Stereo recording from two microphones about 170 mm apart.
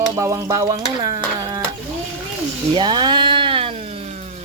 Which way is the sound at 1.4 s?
25° right (ahead or behind).